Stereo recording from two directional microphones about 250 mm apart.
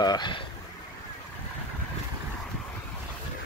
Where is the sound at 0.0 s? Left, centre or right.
Centre.